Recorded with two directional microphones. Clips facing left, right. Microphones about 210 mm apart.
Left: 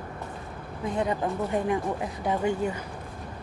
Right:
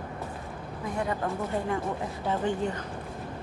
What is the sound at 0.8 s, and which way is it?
Speech, 20° left (ahead or behind).